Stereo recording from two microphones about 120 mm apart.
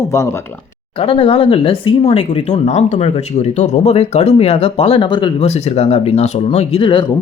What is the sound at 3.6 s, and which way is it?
Speech, 60° left (ahead or behind).